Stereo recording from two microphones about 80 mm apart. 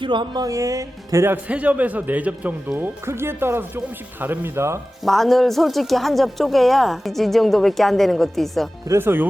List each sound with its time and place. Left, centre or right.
0.0 s speech: right
0.4 s speech: right
1.5 s speech: centre; by 4.8 s right
5.0 s speech: centre
8.9 s speech: right